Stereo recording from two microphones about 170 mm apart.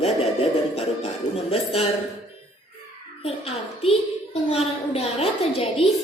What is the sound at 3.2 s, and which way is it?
Speech, 35° left (ahead or behind).